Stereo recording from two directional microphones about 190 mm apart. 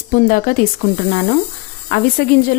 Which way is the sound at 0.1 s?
45° left (ahead or behind).